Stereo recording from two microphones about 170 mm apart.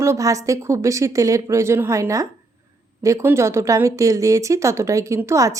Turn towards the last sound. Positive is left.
turn(degrees=-20)  # may be behind; listen again after turning